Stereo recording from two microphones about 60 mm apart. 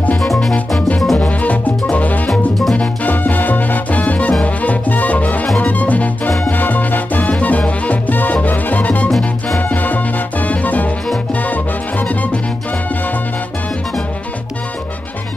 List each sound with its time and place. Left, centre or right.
0.2 s music: centre
0.7 s music: centre